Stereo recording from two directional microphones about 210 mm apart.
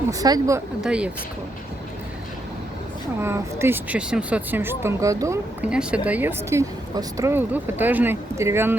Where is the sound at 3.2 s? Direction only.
10° right (ahead or behind).